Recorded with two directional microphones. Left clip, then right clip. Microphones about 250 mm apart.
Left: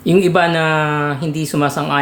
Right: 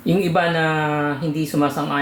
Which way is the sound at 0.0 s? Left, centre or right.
Left.